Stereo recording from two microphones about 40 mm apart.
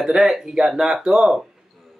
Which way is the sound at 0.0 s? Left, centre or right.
Centre.